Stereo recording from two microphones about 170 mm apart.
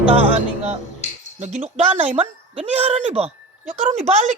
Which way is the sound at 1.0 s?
45° left (ahead or behind).